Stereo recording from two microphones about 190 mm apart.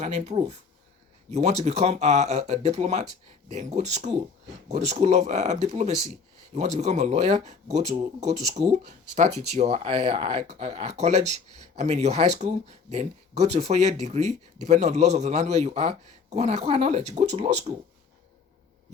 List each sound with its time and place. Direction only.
0.0 s speech: 35° right (ahead or behind)